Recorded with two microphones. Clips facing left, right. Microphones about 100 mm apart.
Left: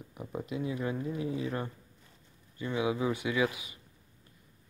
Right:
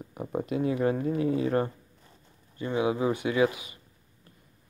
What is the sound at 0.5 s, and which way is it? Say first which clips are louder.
Speech: right 8 dB; 55° right (ahead or behind).